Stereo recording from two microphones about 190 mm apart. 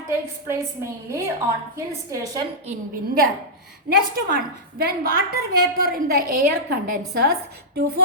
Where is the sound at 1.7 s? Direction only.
15° right (ahead or behind).